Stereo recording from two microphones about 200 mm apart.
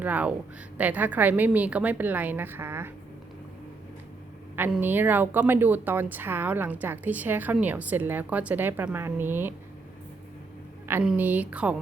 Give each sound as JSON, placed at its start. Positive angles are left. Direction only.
{"t": 0.0, "sound": "speech", "side_deg": -10}
{"t": 4.5, "sound": "speech", "side_deg": -10}
{"t": 10.8, "sound": "speech", "side_deg": -5}